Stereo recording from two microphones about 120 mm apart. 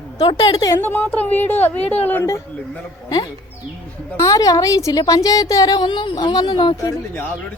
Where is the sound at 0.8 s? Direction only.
15° left (ahead or behind).